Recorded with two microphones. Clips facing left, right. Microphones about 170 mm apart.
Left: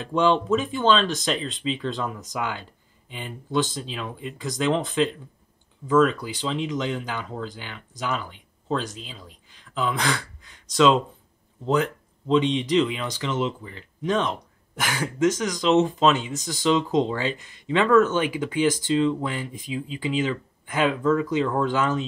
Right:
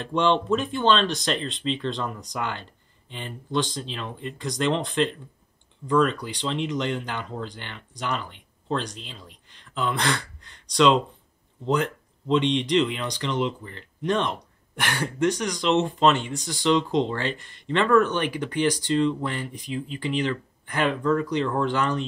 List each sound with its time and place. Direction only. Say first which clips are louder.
0.0 s speech: left 1 dB; 5° left (ahead or behind)